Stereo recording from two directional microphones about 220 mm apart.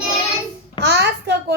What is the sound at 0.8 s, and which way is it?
Speech, 50° right (ahead or behind).